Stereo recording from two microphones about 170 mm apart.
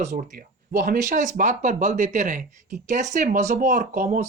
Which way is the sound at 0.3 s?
55° right (ahead or behind).